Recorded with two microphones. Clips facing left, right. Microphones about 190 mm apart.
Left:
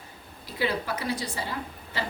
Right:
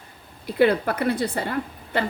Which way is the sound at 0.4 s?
60° right (ahead or behind).